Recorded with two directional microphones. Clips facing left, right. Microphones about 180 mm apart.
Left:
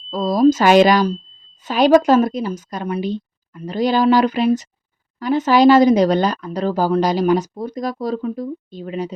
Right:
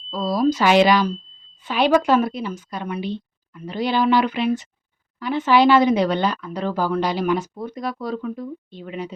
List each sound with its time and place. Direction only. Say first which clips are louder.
0.1 s speech: left 6 dB; 45° left (ahead or behind)